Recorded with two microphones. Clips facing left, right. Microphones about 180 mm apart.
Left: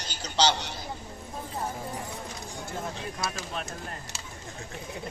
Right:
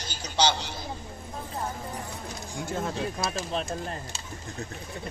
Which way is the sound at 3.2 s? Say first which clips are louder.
Right 1 dB; 35° right (ahead or behind).